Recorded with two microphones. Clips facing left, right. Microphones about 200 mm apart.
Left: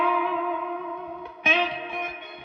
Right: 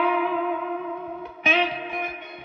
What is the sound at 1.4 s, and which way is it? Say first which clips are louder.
Music: right 2 dB; centre (ahead or behind).